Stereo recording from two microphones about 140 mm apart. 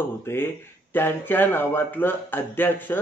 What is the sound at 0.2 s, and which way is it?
Speech, 15° left (ahead or behind).